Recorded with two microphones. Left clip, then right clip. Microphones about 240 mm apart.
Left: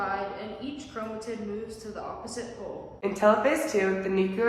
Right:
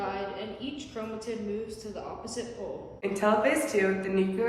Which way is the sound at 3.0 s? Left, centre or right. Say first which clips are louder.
Left 3 dB; left.